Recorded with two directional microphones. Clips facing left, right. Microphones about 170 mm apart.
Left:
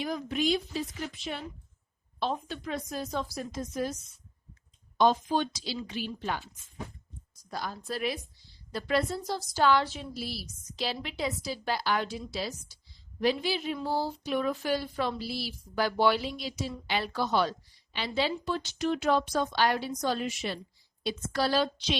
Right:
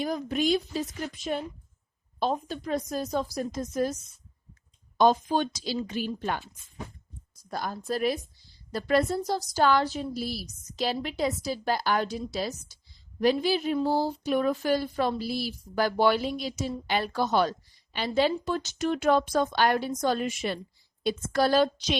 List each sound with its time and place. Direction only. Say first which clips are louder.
0.0 s a woman's voice: right 3 dB; 40° right (ahead or behind)
4.9 s a woman's voice: right 3 dB; 45° right (ahead or behind)
7.5 s a woman's voice: right 4 dB; 45° right (ahead or behind)